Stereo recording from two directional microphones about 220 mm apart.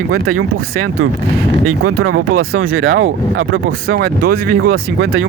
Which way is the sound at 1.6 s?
80° right.